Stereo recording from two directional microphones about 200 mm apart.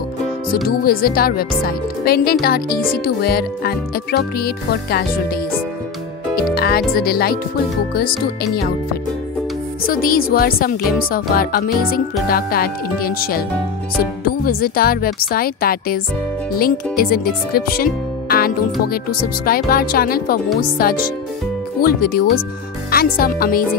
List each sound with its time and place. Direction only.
0.5 s speech: 50° left (ahead or behind)
6.5 s speech: 50° left (ahead or behind)
9.8 s speech: 45° left (ahead or behind)